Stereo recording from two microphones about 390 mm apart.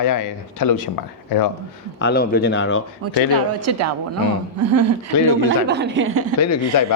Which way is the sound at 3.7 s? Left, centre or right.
Right.